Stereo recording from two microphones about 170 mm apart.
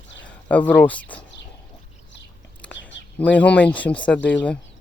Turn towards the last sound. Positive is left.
turn(degrees=10)  # may be behind; listen again after turning